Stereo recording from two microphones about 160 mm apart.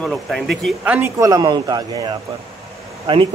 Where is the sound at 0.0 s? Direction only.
Centre (ahead or behind).